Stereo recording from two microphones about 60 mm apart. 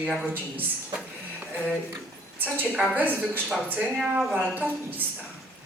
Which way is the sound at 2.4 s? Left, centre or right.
Right.